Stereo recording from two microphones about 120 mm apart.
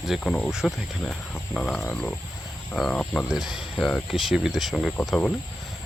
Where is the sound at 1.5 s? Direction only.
10° left (ahead or behind).